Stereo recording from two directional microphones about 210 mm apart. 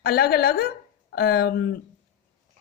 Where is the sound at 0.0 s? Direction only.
50° left (ahead or behind).